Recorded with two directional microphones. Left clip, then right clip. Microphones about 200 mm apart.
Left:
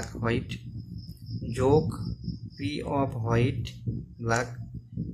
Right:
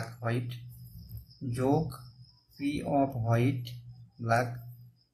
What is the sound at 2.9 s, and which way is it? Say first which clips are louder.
Speech: even; 30° left (ahead or behind).